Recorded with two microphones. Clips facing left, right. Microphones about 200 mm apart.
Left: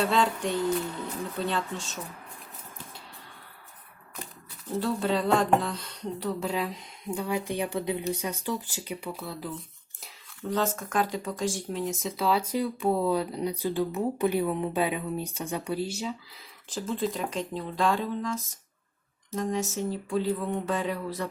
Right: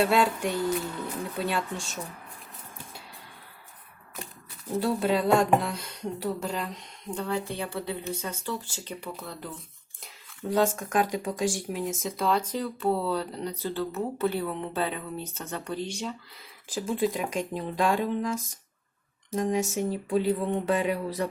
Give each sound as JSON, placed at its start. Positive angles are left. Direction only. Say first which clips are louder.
{"t": 0.1, "sound": "speech", "louder": "right 1 dB", "side_deg": -10}
{"t": 4.9, "sound": "speech", "louder": "right 2 dB", "side_deg": -10}
{"t": 10.6, "sound": "speech", "louder": "right 4 dB", "side_deg": -15}
{"t": 11.7, "sound": "speech", "louder": "even", "side_deg": 0}
{"t": 16.6, "sound": "speech", "louder": "right 3 dB", "side_deg": -10}
{"t": 19.3, "sound": "speech", "louder": "right 3 dB", "side_deg": -15}